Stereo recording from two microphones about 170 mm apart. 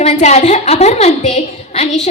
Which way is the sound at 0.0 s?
45° left (ahead or behind).